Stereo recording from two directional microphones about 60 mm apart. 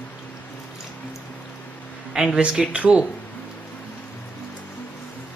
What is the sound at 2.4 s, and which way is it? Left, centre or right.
Speech, centre.